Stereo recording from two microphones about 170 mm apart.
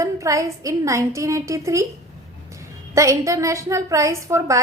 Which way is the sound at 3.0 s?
20° right (ahead or behind).